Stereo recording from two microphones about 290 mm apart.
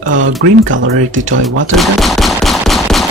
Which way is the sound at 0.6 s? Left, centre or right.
Right.